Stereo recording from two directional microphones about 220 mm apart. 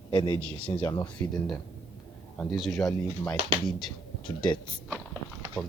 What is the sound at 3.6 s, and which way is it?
Speech, 5° left (ahead or behind).